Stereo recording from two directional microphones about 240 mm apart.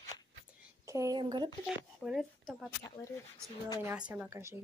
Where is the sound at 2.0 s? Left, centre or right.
Centre.